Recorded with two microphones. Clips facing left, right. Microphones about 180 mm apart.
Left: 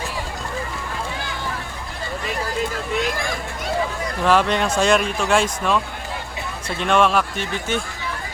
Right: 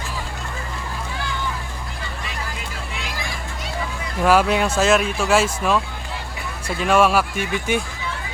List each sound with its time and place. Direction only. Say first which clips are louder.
2.9 s vehicle: left 9 dB; 50° left (ahead or behind)
4.2 s speech: right 1 dB; 5° right (ahead or behind)